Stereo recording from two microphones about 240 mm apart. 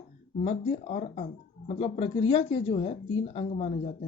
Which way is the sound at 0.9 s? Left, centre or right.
Left.